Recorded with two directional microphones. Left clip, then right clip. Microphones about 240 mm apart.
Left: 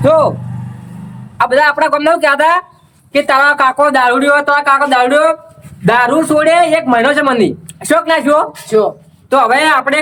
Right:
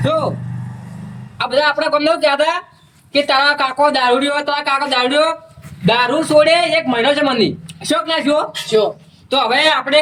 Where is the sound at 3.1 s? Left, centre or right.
Centre.